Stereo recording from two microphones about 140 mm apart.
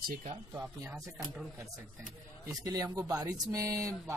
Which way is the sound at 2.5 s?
25° right (ahead or behind).